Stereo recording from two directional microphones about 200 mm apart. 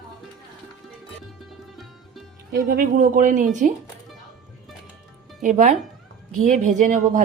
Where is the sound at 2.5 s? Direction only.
55° right (ahead or behind).